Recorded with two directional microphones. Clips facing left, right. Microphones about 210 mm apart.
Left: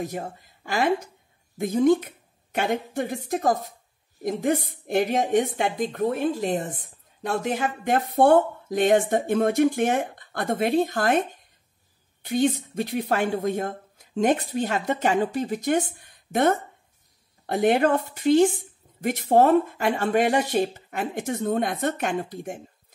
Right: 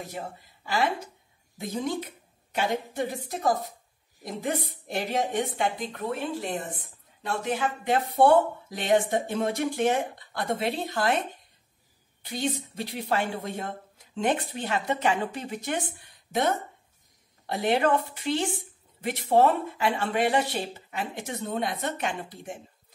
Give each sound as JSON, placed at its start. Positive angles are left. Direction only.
{"t": 0.7, "sound": "speech", "side_deg": 45}
{"t": 12.3, "sound": "speech", "side_deg": 50}
{"t": 16.3, "sound": "speech", "side_deg": 55}